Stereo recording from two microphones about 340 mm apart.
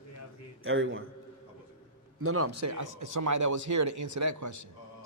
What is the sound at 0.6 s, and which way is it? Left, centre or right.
Speech, right.